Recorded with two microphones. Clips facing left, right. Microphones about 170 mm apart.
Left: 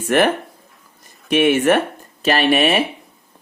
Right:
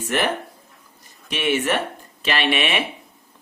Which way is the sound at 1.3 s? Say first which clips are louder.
Left 8 dB; 50° left (ahead or behind).